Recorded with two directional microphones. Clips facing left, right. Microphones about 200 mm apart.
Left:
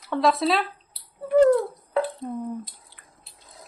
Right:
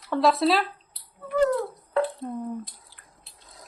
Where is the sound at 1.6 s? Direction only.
Centre (ahead or behind).